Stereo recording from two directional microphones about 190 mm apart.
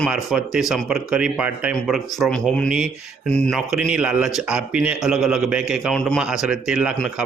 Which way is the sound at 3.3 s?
Centre (ahead or behind).